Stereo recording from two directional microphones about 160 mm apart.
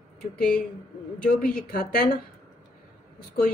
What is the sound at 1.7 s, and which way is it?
Speech, 75° left (ahead or behind).